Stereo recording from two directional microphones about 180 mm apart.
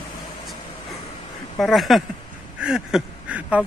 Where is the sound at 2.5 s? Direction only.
5° right (ahead or behind).